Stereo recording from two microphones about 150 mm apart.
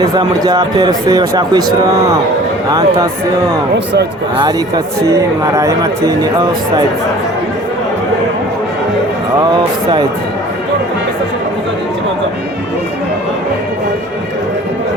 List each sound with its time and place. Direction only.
0.0 s speech: 25° right (ahead or behind)
9.4 s speech: 30° right (ahead or behind)